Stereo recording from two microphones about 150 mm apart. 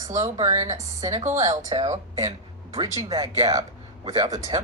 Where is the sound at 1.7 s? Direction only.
35° right (ahead or behind).